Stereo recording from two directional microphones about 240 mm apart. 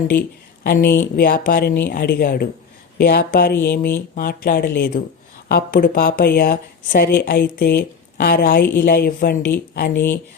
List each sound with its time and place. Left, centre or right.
0.1 s speech: left